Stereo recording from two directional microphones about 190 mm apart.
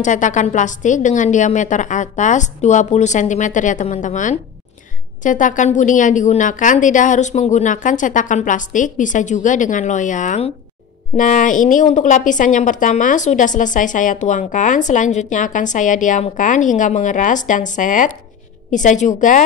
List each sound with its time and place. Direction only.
0.0 s a woman's voice: 40° left (ahead or behind)